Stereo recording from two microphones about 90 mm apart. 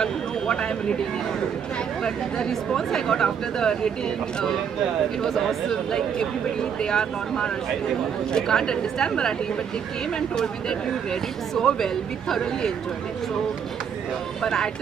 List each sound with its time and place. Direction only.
0.0 s a sound: 10° left (ahead or behind)
2.0 s speech: 5° left (ahead or behind)
5.2 s speech: 5° left (ahead or behind)
14.4 s speech: 5° left (ahead or behind)